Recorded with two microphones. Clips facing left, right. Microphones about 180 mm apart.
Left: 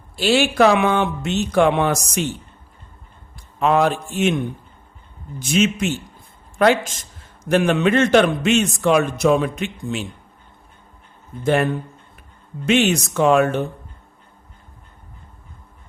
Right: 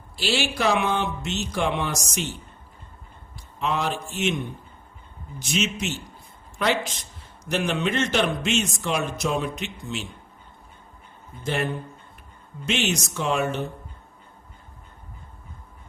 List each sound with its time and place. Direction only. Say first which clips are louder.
0.2 s a man's voice: left 9 dB; 55° left (ahead or behind)
3.6 s a man's voice: left 9 dB; 55° left (ahead or behind)
5.4 s a man's voice: left 8 dB; 55° left (ahead or behind)
11.4 s speech: left 8 dB; 55° left (ahead or behind)